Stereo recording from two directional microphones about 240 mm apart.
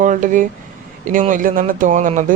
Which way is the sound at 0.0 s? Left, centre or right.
Right.